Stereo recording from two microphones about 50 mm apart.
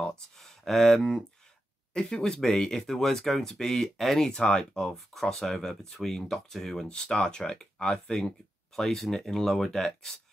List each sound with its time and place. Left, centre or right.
0.4 s speech: centre
4.3 s speech: centre
4.9 s speech: centre